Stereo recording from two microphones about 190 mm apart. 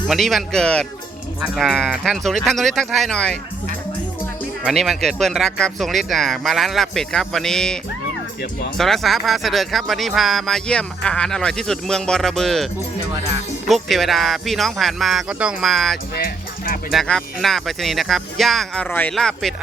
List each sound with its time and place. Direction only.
0.1 s speech: centre (ahead or behind)
4.6 s speech: centre (ahead or behind)
8.8 s speech: centre (ahead or behind)
13.7 s speech: centre (ahead or behind)
16.1 s music: 50° left (ahead or behind)
16.9 s speech: centre (ahead or behind)